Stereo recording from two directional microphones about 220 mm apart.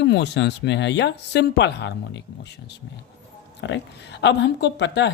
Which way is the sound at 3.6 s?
55° left (ahead or behind).